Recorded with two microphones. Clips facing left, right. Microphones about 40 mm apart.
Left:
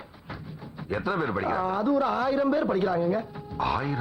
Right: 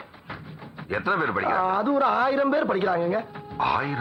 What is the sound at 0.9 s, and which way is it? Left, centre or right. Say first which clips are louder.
Radio: right 3 dB; right.